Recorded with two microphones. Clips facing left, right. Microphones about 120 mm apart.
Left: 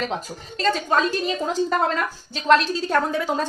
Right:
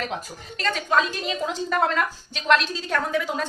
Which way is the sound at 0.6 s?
35° left (ahead or behind).